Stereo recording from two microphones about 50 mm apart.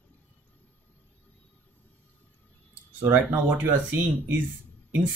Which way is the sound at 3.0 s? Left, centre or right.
Right.